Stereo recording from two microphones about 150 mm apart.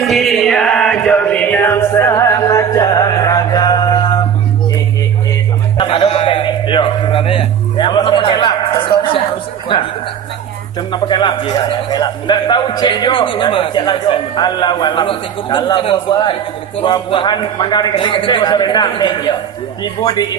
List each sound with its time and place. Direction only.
0.0 s music: centre (ahead or behind); by 4.2 s 30° left (ahead or behind)
5.7 s a sound: 35° left (ahead or behind)
10.9 s a man's voice: 30° left (ahead or behind)